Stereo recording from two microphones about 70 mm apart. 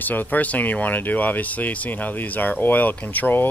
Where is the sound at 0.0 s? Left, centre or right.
Left.